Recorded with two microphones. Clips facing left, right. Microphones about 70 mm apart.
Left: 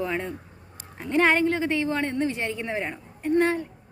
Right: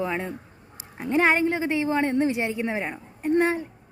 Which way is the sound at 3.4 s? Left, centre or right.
Centre.